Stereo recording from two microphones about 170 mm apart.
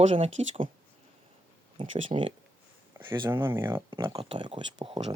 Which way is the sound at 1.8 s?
30° right (ahead or behind).